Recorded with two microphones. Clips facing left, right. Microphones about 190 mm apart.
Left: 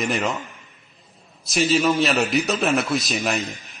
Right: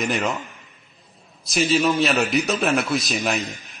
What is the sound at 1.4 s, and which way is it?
A man's voice, centre (ahead or behind).